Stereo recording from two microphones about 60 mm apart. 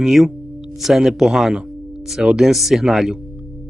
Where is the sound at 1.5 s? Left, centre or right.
Centre.